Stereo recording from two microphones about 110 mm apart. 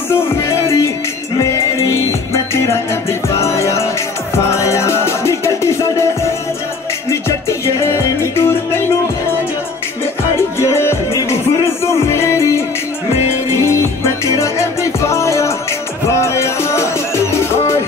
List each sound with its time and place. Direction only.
0.1 s music: 25° left (ahead or behind)
7.1 s music: 25° left (ahead or behind)
10.6 s music: 25° left (ahead or behind)
13.7 s music: 25° left (ahead or behind)